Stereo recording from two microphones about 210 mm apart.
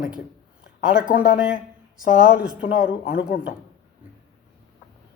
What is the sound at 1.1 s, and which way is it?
Speech, 5° right (ahead or behind).